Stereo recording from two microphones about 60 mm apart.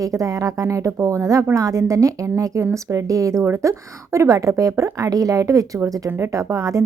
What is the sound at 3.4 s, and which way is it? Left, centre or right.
A woman's voice, right.